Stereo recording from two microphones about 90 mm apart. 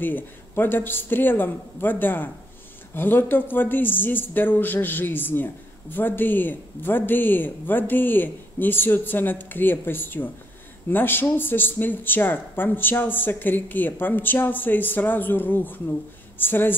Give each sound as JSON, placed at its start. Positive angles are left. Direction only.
{"t": 0.0, "sound": "speech", "side_deg": 20}